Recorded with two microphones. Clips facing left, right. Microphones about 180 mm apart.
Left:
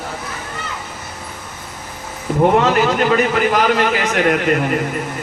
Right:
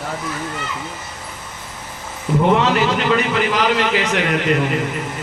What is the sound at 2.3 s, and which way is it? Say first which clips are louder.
A man's voice: left 2 dB; 50° left (ahead or behind).